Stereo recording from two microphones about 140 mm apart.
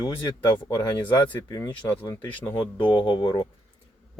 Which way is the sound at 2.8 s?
40° left (ahead or behind).